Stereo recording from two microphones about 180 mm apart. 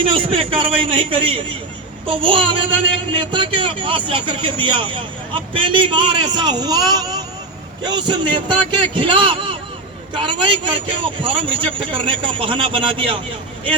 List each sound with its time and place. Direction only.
0.0 s speech: 30° right (ahead or behind)